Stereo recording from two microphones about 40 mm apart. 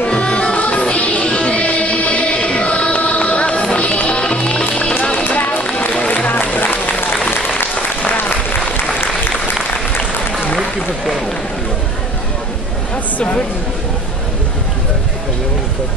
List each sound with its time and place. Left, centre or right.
0.0 s music: left
5.1 s run: left
5.9 s run: left
6.2 s a sound: left
8.1 s applause: left
12.9 s a sound: left